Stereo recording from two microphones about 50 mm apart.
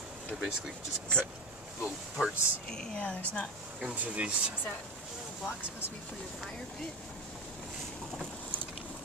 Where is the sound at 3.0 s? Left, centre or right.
Left.